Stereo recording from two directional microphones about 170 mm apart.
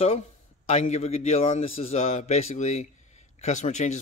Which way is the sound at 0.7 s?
35° left (ahead or behind).